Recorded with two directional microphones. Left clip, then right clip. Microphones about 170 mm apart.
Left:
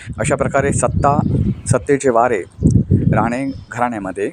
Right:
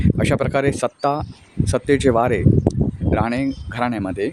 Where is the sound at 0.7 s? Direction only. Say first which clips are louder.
Left 4 dB; 15° right (ahead or behind).